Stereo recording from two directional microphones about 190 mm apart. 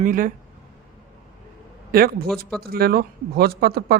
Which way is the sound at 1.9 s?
50° right (ahead or behind).